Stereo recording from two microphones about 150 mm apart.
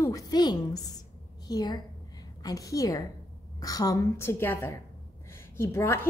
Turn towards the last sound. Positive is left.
turn(degrees=15)  # may be behind; listen again after turning